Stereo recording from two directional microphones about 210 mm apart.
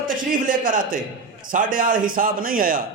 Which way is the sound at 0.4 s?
40° right (ahead or behind).